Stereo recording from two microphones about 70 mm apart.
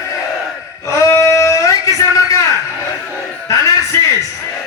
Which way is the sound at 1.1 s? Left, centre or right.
Left.